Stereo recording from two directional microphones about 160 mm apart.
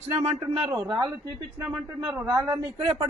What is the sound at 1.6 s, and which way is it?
Speech, 10° right (ahead or behind).